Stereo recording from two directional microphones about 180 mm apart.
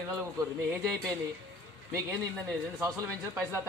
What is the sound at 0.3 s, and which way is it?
Speech, 20° right (ahead or behind).